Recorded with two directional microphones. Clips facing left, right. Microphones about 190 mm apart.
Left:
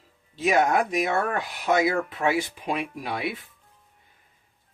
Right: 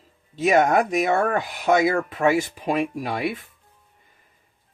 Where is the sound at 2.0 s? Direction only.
45° right (ahead or behind).